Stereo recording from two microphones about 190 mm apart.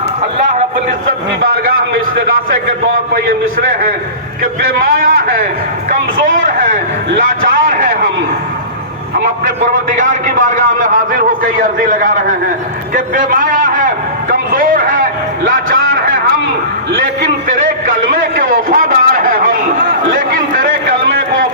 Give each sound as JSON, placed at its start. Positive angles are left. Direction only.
{"t": 5.0, "sound": "a man's voice", "side_deg": -45}
{"t": 9.7, "sound": "a man's voice", "side_deg": -45}
{"t": 18.1, "sound": "a sound", "side_deg": -45}